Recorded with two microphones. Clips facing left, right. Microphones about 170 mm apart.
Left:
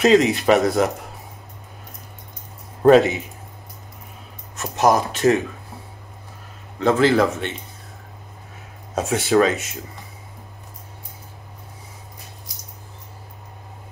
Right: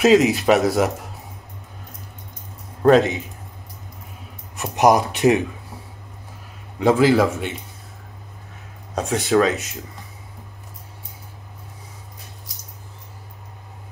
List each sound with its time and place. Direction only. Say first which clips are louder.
0.0 s speech: right 1 dB; 5° right (ahead or behind)
2.8 s speech: left 2 dB; 5° left (ahead or behind)
4.6 s speech: right 2 dB; 15° right (ahead or behind)
6.8 s speech: right 1 dB; 10° right (ahead or behind)
8.9 s speech: left 1 dB; centre (ahead or behind)